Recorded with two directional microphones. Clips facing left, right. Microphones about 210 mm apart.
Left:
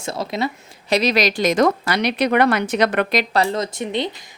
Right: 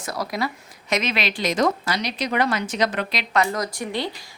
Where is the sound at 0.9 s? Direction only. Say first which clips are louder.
Left 7 dB; 35° left (ahead or behind).